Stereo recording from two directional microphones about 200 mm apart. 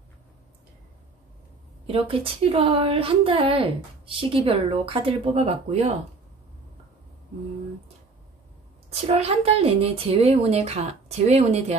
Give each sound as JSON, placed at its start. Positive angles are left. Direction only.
{"t": 1.9, "sound": "a woman's voice", "side_deg": -30}
{"t": 9.0, "sound": "speech", "side_deg": -30}